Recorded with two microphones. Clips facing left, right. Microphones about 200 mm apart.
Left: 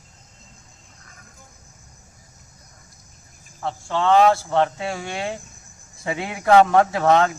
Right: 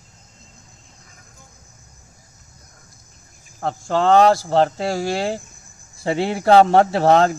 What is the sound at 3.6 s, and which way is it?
Speech, 45° right (ahead or behind).